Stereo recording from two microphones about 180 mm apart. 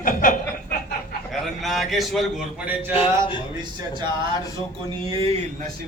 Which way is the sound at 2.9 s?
30° left (ahead or behind).